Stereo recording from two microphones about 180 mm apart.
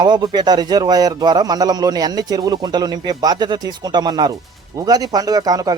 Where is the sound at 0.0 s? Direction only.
25° right (ahead or behind).